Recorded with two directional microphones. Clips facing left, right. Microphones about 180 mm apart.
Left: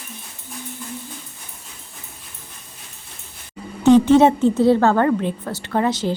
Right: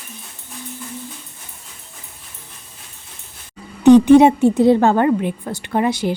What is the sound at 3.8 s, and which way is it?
A woman's voice, 15° right (ahead or behind).